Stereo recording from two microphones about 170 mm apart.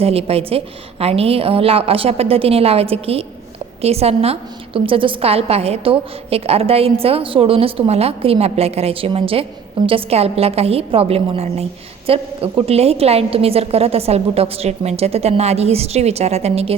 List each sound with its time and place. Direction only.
0.0 s a woman's voice: 35° right (ahead or behind)